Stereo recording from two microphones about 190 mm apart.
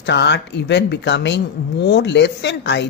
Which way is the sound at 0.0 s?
65° left (ahead or behind).